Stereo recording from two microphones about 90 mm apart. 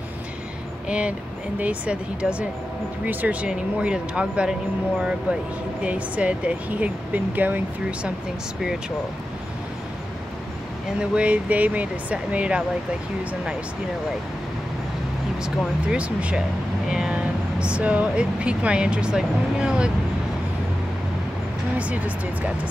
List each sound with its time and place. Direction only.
0.8 s speech: 10° right (ahead or behind)
11.0 s speech: 15° right (ahead or behind)
15.4 s speech: 10° right (ahead or behind)
21.7 s speech: 15° right (ahead or behind)